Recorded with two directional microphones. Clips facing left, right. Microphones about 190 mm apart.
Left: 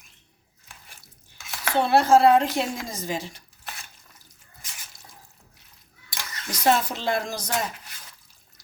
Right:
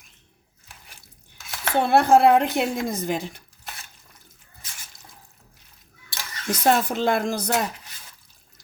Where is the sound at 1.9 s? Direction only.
60° right (ahead or behind).